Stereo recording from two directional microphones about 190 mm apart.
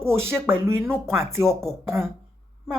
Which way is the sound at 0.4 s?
15° right (ahead or behind).